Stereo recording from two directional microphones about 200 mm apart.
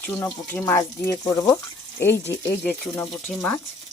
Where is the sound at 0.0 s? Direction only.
10° left (ahead or behind).